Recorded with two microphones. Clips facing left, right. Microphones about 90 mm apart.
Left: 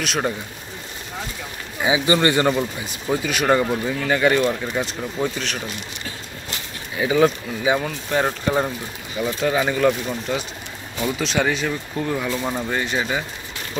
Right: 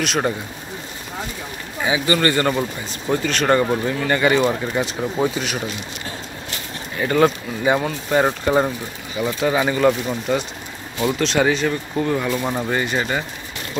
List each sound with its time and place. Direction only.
0.0 s speech: centre (ahead or behind)
1.8 s speech: 15° left (ahead or behind)
2.9 s speech: 5° left (ahead or behind); by 5.6 s 10° right (ahead or behind)
7.0 s speech: centre (ahead or behind)